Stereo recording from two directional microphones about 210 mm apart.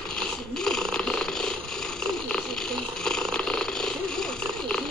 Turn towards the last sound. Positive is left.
turn(degrees=5)  # may be behind; listen again after turning